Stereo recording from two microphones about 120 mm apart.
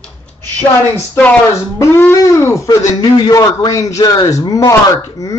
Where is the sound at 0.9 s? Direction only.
20° left (ahead or behind).